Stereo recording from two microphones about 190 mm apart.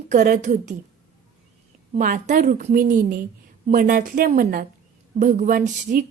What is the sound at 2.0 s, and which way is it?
A woman's voice, 45° right (ahead or behind).